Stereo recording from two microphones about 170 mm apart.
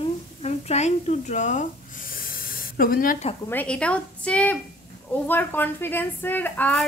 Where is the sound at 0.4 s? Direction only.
40° left (ahead or behind).